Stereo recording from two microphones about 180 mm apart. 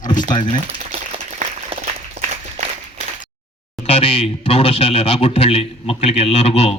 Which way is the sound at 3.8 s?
30° left (ahead or behind).